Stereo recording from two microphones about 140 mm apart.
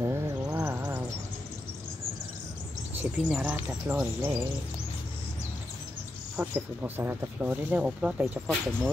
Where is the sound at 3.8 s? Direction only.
15° right (ahead or behind).